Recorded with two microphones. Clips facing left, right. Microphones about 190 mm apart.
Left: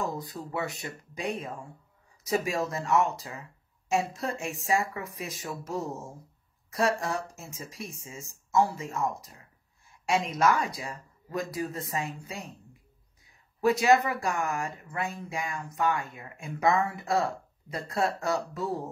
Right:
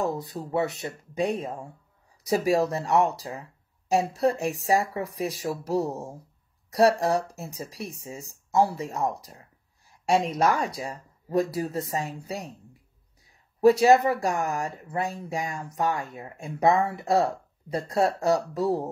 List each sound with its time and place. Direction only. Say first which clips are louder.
0.5 s speech: right 8 dB; 35° right (ahead or behind)
13.6 s speech: right 5 dB; 35° right (ahead or behind)